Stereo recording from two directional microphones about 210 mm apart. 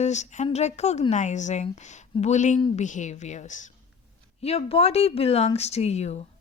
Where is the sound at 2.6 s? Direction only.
25° left (ahead or behind).